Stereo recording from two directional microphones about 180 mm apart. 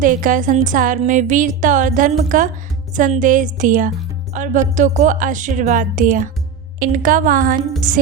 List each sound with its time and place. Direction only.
0.0 s speech: 50° right (ahead or behind)